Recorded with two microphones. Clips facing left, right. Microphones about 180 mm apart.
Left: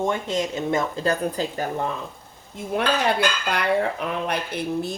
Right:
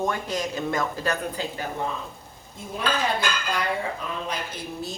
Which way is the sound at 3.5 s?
70° left (ahead or behind).